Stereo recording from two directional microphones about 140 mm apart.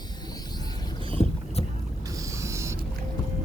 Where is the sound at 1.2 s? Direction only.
45° left (ahead or behind).